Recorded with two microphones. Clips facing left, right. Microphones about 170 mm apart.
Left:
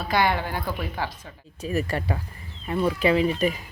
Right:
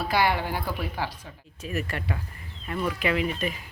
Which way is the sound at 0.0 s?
10° right (ahead or behind).